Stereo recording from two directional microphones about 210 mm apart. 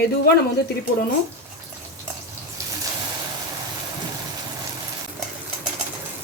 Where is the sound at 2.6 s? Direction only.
15° right (ahead or behind).